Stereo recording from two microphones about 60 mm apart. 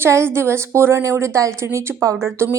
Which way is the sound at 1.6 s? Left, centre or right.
Right.